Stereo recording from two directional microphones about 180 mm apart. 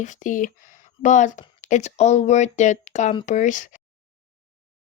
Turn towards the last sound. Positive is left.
turn(degrees=45)  # may be behind; listen again after turning